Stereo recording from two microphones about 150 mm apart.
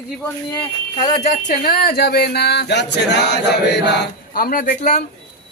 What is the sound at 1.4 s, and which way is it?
Speech, 75° left (ahead or behind).